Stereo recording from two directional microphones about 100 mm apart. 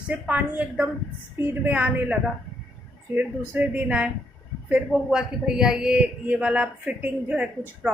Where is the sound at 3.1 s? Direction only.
15° right (ahead or behind).